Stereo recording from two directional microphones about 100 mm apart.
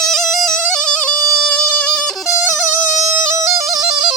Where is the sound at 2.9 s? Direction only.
30° right (ahead or behind).